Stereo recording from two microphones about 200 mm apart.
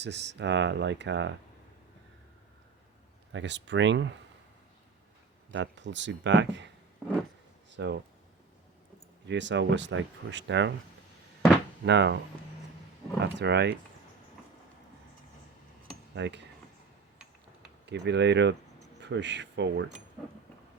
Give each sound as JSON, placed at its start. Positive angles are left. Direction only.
{"t": 0.0, "sound": "speech", "side_deg": -60}
{"t": 3.3, "sound": "speech", "side_deg": -60}
{"t": 5.5, "sound": "speech", "side_deg": -65}
{"t": 7.7, "sound": "speech", "side_deg": -60}
{"t": 9.2, "sound": "speech", "side_deg": -60}
{"t": 11.9, "sound": "speech", "side_deg": -60}
{"t": 13.2, "sound": "speech", "side_deg": -60}
{"t": 16.1, "sound": "speech", "side_deg": -60}
{"t": 17.8, "sound": "speech", "side_deg": -60}